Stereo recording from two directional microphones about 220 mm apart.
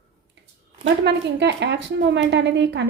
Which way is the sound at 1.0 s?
50° right (ahead or behind).